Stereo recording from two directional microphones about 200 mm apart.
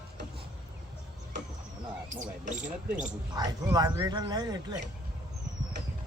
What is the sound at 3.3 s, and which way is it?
Dog, 20° right (ahead or behind).